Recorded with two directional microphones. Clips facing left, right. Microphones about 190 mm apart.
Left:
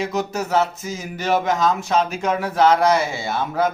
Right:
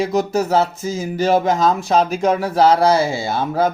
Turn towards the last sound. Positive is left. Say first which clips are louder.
# right 3 dB
turn(degrees=-35)  # may be behind; listen again after turning